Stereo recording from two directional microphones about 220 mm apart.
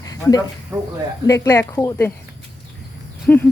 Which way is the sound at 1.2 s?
15° left (ahead or behind).